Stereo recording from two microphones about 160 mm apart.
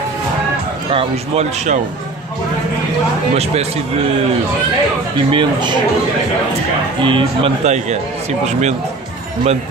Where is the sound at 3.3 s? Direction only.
40° right (ahead or behind).